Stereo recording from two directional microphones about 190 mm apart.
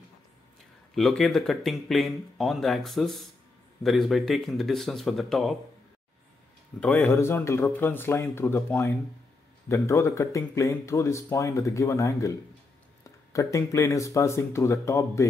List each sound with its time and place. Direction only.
0.9 s speech: centre (ahead or behind)
6.8 s speech: 10° left (ahead or behind)